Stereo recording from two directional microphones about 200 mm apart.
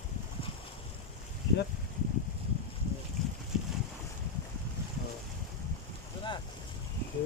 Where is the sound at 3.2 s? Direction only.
Centre (ahead or behind).